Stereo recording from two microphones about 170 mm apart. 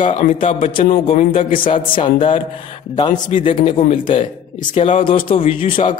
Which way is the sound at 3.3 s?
45° left (ahead or behind).